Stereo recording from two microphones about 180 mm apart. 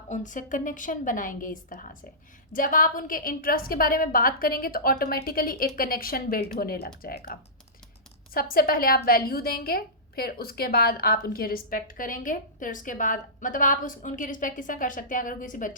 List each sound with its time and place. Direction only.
0.1 s a woman's voice: 45° left (ahead or behind)